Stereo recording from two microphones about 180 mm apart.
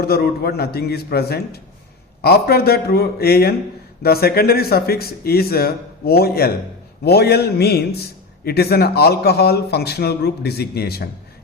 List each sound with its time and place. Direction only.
0.0 s a man's voice: 60° left (ahead or behind)